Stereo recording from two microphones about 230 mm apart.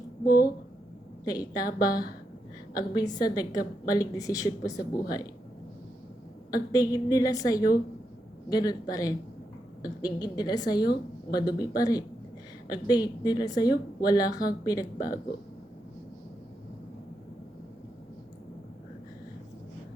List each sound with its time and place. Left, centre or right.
0.3 s a woman's voice: left
1.2 s a woman's voice: centre
6.5 s a woman's voice: centre